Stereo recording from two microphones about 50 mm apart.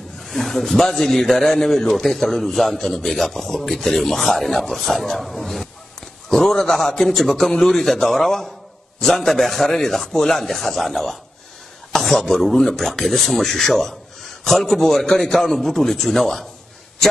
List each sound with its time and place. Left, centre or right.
0.2 s a man's voice: centre